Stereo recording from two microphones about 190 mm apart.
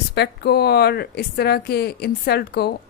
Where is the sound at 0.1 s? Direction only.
60° left (ahead or behind).